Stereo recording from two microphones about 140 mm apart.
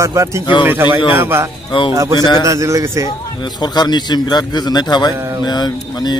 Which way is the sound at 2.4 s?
25° right (ahead or behind).